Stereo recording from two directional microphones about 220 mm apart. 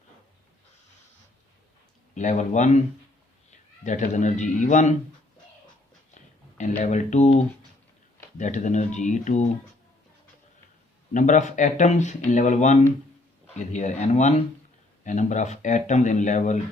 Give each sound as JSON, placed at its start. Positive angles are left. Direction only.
{"t": 2.1, "sound": "a man's voice", "side_deg": 35}
{"t": 6.6, "sound": "speech", "side_deg": 35}
{"t": 8.4, "sound": "speech", "side_deg": 35}
{"t": 11.1, "sound": "speech", "side_deg": 35}